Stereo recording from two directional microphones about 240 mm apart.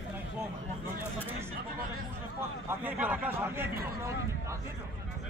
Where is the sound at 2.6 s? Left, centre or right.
Centre.